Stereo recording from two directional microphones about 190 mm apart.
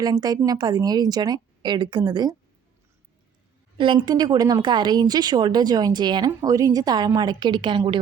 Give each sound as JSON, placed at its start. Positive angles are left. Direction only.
{"t": 0.0, "sound": "speech", "side_deg": -20}
{"t": 3.8, "sound": "speech", "side_deg": -25}